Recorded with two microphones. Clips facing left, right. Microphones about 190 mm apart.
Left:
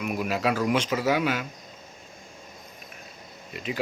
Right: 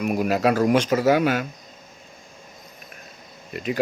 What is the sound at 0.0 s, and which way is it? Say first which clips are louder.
Speech: right 6 dB; 45° right (ahead or behind).